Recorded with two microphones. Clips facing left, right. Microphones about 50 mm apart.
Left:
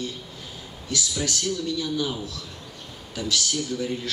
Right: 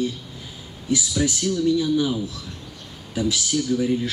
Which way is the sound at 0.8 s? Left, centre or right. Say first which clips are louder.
Right 6 dB; centre.